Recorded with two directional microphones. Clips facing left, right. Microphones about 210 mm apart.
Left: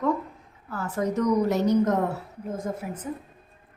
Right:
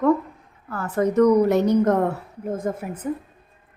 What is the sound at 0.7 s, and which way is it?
A woman's voice, 60° right (ahead or behind).